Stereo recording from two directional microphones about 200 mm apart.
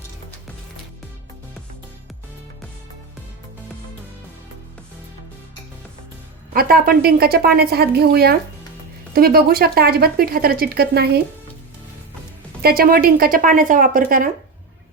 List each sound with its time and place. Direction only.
6.5 s speech: 50° right (ahead or behind)
12.6 s speech: 50° right (ahead or behind)